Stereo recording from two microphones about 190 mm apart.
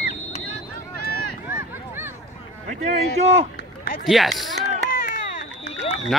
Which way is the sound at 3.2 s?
30° right (ahead or behind).